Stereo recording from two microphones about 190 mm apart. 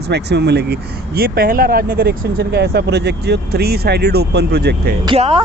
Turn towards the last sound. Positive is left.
turn(degrees=-30)  # may be behind; listen again after turning